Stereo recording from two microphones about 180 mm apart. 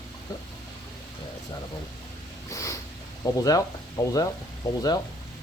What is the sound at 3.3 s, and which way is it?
Speech, 20° left (ahead or behind).